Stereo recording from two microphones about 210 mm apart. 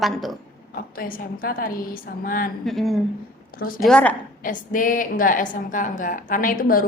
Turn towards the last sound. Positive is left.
turn(degrees=40)  # may be behind; listen again after turning